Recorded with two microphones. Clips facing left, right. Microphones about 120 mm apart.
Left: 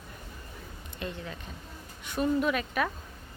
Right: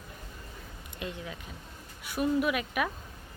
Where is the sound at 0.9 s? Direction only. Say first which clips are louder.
Left 1 dB; 15° right (ahead or behind).